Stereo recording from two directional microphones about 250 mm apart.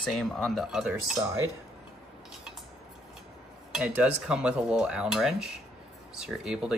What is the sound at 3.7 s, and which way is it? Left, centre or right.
Cutlery, centre.